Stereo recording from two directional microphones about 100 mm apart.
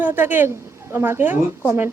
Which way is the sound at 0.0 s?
20° right (ahead or behind).